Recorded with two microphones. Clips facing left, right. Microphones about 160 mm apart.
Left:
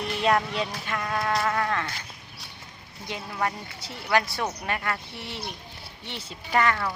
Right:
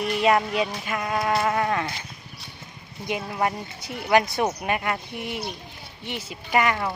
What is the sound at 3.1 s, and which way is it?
Speech, 20° right (ahead or behind).